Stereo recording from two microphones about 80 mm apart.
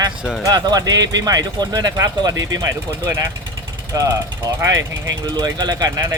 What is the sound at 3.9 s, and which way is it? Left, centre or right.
Speech, right.